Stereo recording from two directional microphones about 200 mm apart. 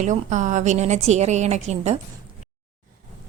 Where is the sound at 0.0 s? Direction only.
40° right (ahead or behind).